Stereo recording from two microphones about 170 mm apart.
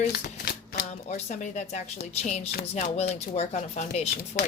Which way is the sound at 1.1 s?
45° left (ahead or behind).